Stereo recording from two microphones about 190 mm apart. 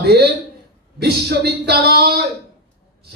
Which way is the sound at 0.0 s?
55° right (ahead or behind).